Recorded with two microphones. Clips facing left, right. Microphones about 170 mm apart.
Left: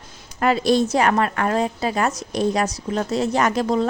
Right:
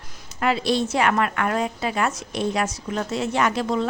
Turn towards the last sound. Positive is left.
turn(degrees=40)  # may be behind; listen again after turning